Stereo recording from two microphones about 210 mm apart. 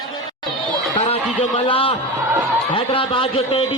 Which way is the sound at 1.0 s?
30° left (ahead or behind).